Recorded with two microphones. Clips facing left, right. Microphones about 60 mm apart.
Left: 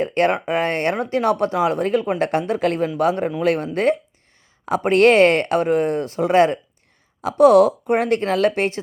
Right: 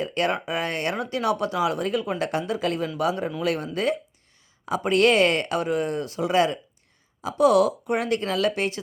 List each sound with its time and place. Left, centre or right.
0.0 s speech: left